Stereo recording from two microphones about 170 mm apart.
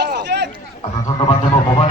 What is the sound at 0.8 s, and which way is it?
Goat, 30° left (ahead or behind).